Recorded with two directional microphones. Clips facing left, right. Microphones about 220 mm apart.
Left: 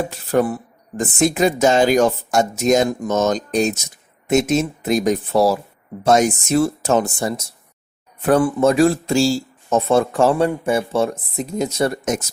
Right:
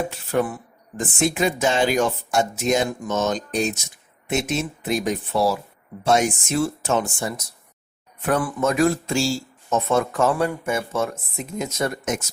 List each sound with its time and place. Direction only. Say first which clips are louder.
0.1 s speech: left 5 dB; 40° left (ahead or behind)